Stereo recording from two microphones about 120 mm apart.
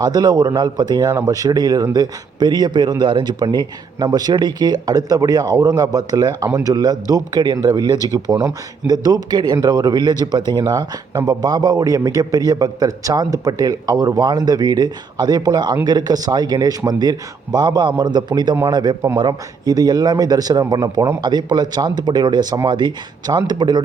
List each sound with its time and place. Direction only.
0.0 s speech: 35° right (ahead or behind)